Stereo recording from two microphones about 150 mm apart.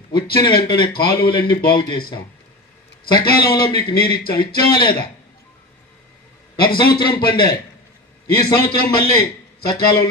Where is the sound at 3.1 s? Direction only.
90° left.